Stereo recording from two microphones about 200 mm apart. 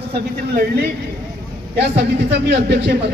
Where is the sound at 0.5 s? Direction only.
50° right (ahead or behind).